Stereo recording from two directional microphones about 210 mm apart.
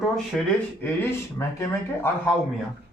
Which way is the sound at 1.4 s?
10° left (ahead or behind).